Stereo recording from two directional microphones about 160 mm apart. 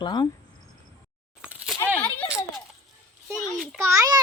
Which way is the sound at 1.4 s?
5° right (ahead or behind).